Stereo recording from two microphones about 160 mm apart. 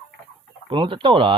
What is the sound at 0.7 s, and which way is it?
Speech, 30° right (ahead or behind).